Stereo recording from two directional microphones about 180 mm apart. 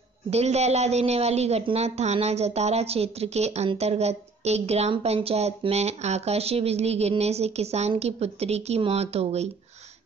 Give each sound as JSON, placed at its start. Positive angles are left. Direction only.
{"t": 0.3, "sound": "speech", "side_deg": -35}